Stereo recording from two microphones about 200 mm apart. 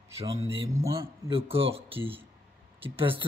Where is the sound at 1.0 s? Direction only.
25° right (ahead or behind).